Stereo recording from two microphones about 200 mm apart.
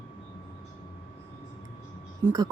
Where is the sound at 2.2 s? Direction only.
20° right (ahead or behind).